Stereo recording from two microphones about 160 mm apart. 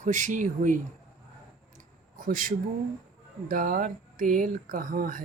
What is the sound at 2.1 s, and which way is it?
Speech, 60° right (ahead or behind).